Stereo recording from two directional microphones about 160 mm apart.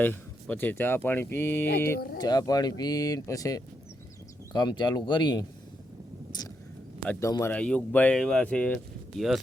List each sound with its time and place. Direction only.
0.0 s speech: 10° left (ahead or behind)
2.1 s speech: 25° left (ahead or behind)
7.1 s speech: 20° left (ahead or behind)
7.5 s speech: 5° left (ahead or behind)